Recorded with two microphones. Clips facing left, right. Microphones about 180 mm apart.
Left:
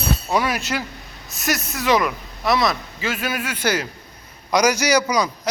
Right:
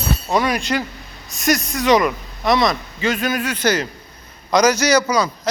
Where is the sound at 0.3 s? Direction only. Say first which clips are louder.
Right 4 dB; 5° left (ahead or behind).